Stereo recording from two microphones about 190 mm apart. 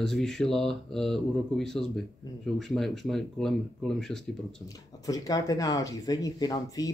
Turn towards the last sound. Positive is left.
turn(degrees=20)  # may be behind; listen again after turning